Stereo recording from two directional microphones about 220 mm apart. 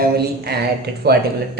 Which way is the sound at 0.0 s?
45° right (ahead or behind).